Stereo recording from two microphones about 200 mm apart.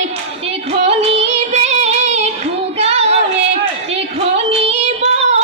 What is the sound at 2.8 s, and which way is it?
Child singing, 30° right (ahead or behind).